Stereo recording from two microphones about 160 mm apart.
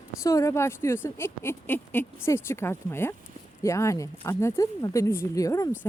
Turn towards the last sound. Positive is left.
turn(degrees=20)  # may be behind; listen again after turning